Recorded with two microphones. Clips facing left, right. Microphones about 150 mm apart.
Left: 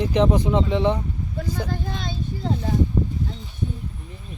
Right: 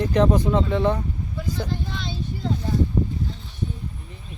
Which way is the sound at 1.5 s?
45° left (ahead or behind).